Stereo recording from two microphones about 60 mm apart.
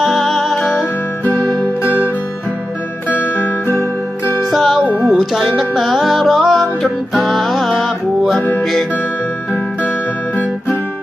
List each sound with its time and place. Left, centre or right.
0.0 s music: centre
3.1 s music: left
4.5 s music: centre
8.4 s music: left